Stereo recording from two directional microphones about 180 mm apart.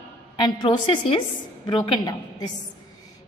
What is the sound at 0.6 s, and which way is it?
A woman's voice, 25° left (ahead or behind).